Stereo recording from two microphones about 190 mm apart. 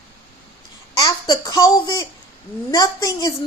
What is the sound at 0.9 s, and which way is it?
A child's voice, 20° left (ahead or behind).